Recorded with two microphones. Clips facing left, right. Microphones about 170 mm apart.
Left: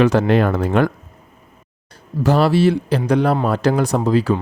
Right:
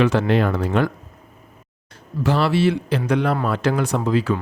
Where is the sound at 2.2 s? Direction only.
40° left (ahead or behind).